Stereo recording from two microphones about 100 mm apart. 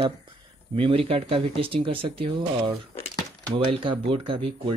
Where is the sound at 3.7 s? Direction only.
60° right (ahead or behind).